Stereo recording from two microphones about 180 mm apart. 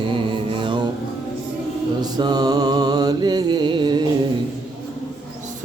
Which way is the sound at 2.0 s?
25° right (ahead or behind).